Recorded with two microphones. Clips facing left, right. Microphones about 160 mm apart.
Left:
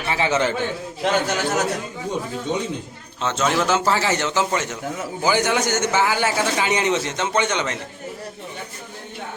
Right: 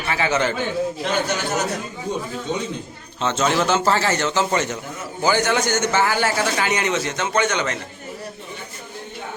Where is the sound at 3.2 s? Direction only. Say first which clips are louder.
Right 1 dB; centre (ahead or behind); by 7.8 s 20° left (ahead or behind).